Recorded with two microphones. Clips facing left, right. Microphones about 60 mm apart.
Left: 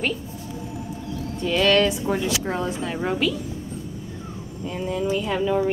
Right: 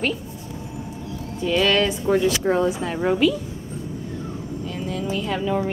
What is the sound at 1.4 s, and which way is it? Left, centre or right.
Speech, centre.